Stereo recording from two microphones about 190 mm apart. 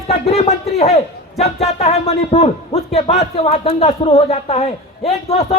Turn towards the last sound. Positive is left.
turn(degrees=35)  # may be behind; listen again after turning